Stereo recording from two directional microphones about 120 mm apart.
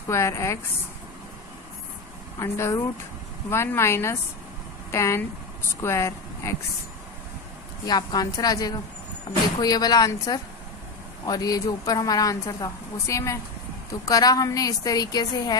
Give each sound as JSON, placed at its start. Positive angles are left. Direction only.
{"t": 0.1, "sound": "a woman's voice", "side_deg": 25}
{"t": 2.3, "sound": "a woman's voice", "side_deg": 25}
{"t": 7.8, "sound": "a woman's voice", "side_deg": 35}